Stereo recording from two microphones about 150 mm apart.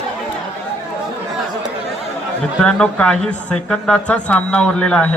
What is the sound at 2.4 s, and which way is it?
Speech, 5° left (ahead or behind).